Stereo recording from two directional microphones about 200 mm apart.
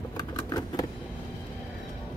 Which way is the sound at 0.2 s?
20° left (ahead or behind).